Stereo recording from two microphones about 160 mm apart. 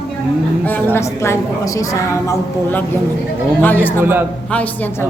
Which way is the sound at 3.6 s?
10° left (ahead or behind).